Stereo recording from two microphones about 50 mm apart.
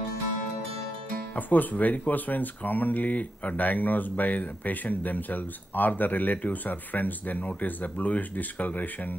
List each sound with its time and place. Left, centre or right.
1.3 s speech: left